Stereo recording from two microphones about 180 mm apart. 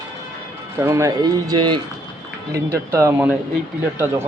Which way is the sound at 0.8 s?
15° right (ahead or behind).